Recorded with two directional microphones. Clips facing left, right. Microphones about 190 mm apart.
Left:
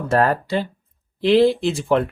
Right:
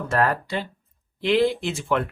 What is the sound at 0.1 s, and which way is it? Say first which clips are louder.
Speech: left 5 dB; 35° left (ahead or behind).